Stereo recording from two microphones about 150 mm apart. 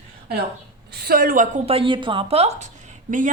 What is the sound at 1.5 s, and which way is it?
A woman's voice, 40° right (ahead or behind).